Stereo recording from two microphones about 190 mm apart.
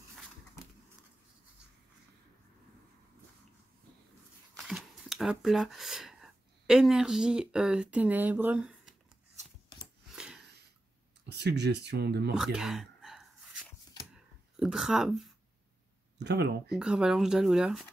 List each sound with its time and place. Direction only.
4.6 s speech: centre (ahead or behind)
10.1 s a sound: 5° right (ahead or behind)
11.2 s speech: 60° right (ahead or behind)
12.4 s speech: centre (ahead or behind)
14.1 s a sound: centre (ahead or behind)
16.2 s speech: 60° right (ahead or behind)
16.7 s speech: 5° right (ahead or behind)